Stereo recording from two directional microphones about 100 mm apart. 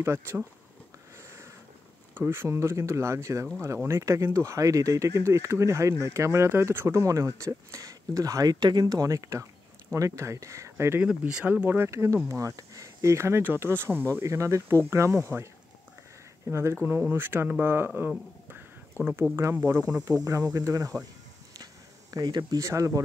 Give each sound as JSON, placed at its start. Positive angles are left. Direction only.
{"t": 0.0, "sound": "speech", "side_deg": -25}
{"t": 2.1, "sound": "speech", "side_deg": -25}
{"t": 11.1, "sound": "speech", "side_deg": -10}
{"t": 16.4, "sound": "speech", "side_deg": -30}
{"t": 19.3, "sound": "speech", "side_deg": -25}
{"t": 22.1, "sound": "speech", "side_deg": -45}
{"t": 22.6, "sound": "speech", "side_deg": -30}